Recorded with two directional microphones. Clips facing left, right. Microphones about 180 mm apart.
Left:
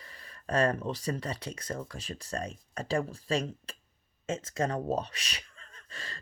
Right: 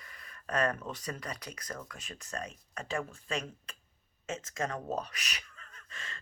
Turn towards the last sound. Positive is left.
turn(degrees=35)  # may be behind; listen again after turning